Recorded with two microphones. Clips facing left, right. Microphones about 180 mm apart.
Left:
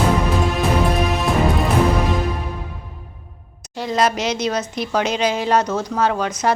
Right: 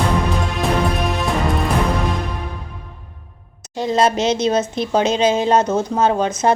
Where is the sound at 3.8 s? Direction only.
25° right (ahead or behind).